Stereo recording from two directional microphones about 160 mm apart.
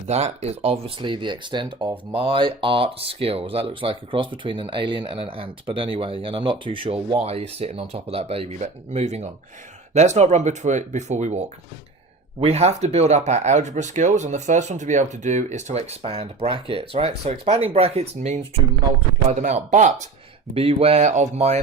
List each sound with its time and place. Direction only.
0.1 s speech: 40° right (ahead or behind)